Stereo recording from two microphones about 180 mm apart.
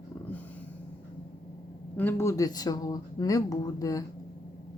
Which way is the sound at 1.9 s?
10° left (ahead or behind).